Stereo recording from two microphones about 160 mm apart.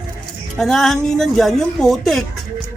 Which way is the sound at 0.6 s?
Centre (ahead or behind).